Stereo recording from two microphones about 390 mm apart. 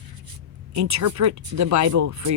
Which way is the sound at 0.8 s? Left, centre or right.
Right.